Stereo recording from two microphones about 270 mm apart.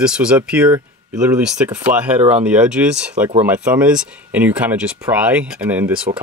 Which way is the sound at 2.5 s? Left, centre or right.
Centre.